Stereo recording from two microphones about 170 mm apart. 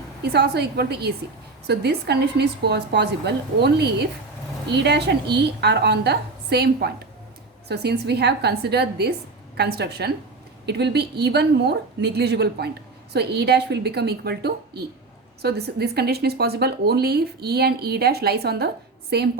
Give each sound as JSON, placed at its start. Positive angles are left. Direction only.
{"t": 0.2, "sound": "speech", "side_deg": -75}